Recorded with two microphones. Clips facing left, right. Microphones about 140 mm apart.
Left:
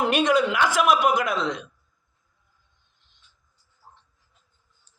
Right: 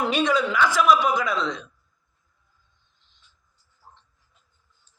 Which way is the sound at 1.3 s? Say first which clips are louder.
Left 1 dB; 15° left (ahead or behind).